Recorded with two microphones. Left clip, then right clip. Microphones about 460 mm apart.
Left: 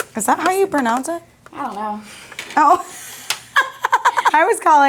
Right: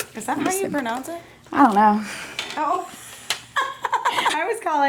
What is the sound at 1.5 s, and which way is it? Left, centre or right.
Speech, right.